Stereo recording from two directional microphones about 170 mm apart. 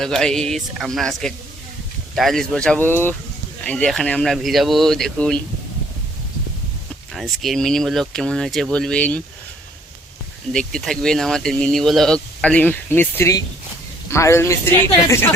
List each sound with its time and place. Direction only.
0.0 s speech: 5° left (ahead or behind)
7.1 s speech: centre (ahead or behind)
10.5 s speech: 5° left (ahead or behind)